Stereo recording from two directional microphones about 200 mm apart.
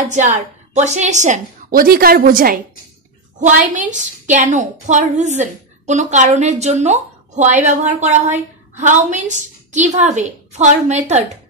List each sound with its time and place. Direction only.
0.0 s a woman's voice: 35° right (ahead or behind)